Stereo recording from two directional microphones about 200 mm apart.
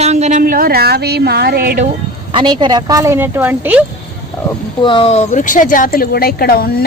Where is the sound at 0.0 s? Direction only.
35° right (ahead or behind).